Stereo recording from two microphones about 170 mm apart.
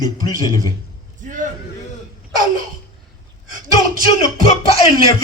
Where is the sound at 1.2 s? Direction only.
50° right (ahead or behind).